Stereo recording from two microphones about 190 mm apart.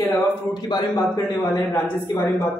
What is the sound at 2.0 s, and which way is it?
Speech, 15° left (ahead or behind).